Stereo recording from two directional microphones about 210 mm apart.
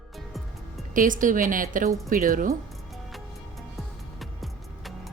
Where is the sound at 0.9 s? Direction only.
40° right (ahead or behind).